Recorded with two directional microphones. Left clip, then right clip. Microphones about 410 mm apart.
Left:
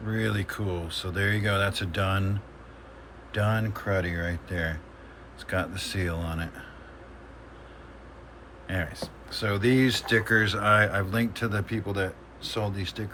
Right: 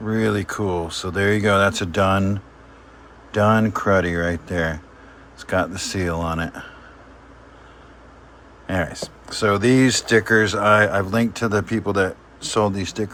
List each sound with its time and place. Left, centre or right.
0.1 s speech: centre
3.3 s speech: centre
8.6 s speech: centre